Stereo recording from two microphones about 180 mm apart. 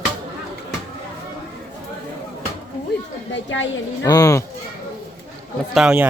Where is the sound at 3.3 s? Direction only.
90° left.